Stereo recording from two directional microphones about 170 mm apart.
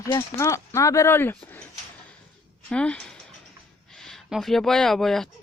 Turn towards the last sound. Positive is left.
turn(degrees=0)  # may be behind; listen again after turning